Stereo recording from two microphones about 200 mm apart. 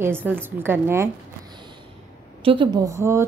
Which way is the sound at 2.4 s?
25° right (ahead or behind).